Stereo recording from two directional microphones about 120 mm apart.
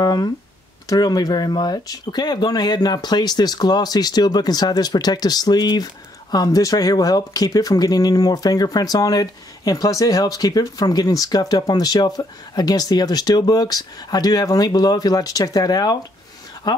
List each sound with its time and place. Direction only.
0.0 s speech: 35° left (ahead or behind)